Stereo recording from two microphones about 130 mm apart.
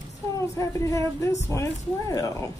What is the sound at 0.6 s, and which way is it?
Speech, 25° left (ahead or behind).